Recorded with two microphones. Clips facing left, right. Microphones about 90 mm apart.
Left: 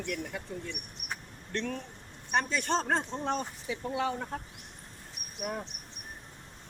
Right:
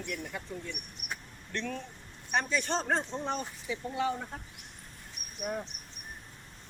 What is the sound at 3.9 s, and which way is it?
Speech, 75° left (ahead or behind).